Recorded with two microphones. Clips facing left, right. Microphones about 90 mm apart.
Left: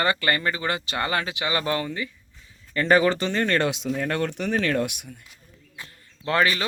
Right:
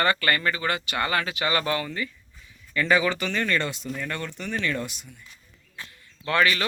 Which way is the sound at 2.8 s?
40° left (ahead or behind).